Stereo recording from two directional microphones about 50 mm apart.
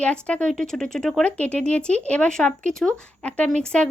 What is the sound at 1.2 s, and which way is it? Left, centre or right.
Speech, left.